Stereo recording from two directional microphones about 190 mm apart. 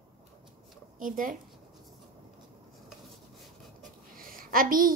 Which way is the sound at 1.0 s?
45° right (ahead or behind).